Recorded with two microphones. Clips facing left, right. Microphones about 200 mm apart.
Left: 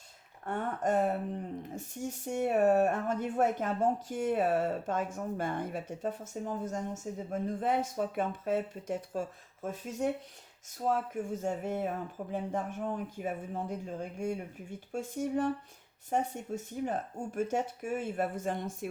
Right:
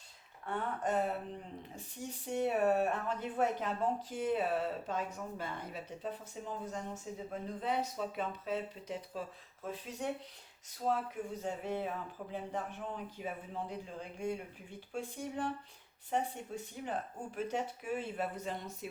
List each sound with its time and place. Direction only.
0.4 s speech: 45° left (ahead or behind)